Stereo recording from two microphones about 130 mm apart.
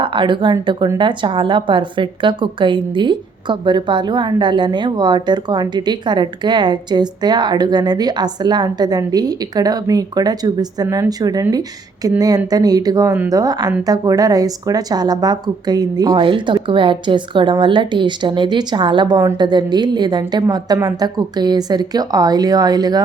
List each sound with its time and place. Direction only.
0.0 s a woman's voice: 40° right (ahead or behind)
10.8 s speech: 15° right (ahead or behind)
11.2 s a woman's voice: 30° right (ahead or behind)